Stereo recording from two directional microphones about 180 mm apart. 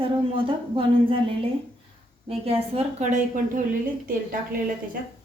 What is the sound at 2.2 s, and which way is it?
A woman's voice, 35° right (ahead or behind).